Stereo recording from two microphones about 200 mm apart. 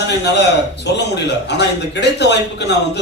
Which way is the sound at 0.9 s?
60° left (ahead or behind).